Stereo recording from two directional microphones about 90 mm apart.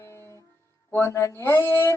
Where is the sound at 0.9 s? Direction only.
30° left (ahead or behind).